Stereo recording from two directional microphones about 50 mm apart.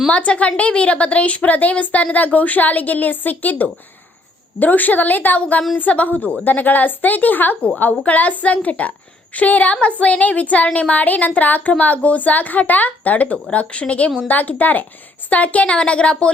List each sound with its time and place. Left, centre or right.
0.1 s a woman's voice: left